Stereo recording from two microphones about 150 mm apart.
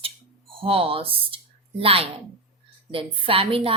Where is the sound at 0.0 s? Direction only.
40° right (ahead or behind).